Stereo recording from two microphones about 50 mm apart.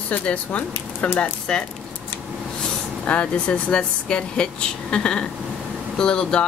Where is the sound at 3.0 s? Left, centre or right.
Left.